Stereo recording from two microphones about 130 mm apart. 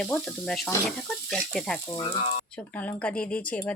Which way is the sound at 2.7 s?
10° left (ahead or behind).